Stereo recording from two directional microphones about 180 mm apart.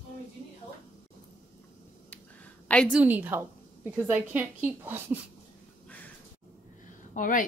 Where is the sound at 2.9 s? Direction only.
10° right (ahead or behind).